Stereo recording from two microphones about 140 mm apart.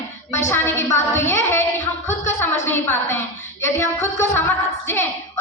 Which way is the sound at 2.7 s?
15° left (ahead or behind).